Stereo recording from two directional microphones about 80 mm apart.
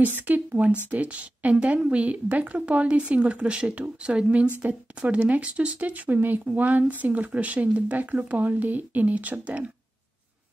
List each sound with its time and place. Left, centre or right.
0.0 s speech: right